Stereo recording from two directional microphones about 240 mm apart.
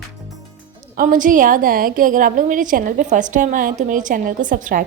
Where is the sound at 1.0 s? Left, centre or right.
Right.